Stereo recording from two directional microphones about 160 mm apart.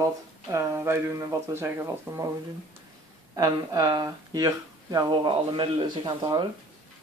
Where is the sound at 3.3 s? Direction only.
25° right (ahead or behind).